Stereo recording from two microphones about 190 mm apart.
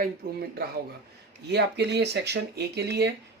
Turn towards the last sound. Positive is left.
turn(degrees=-60)  # may be behind; listen again after turning